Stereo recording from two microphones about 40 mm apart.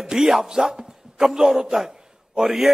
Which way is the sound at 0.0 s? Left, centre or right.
Centre.